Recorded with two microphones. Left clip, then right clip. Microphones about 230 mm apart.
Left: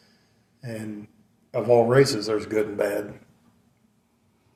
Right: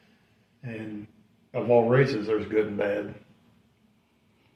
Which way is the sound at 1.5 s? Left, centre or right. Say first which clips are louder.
Left 3 dB; left.